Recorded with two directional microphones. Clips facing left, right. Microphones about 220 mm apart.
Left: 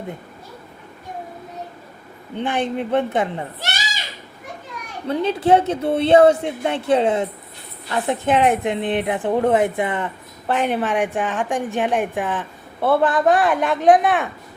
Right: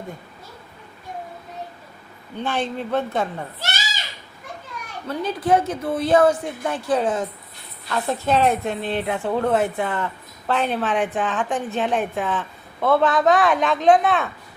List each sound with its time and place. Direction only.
2.3 s a woman's voice: 15° left (ahead or behind)
5.0 s a woman's voice: 25° left (ahead or behind)